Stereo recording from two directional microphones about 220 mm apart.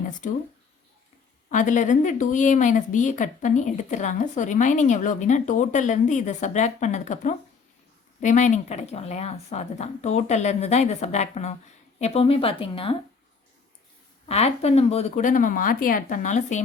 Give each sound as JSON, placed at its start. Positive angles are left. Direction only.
{"t": 0.2, "sound": "speech", "side_deg": 35}
{"t": 1.5, "sound": "a woman's voice", "side_deg": 35}
{"t": 14.3, "sound": "speech", "side_deg": 30}